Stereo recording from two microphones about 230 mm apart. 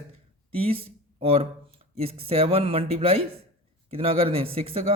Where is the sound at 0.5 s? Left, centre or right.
Right.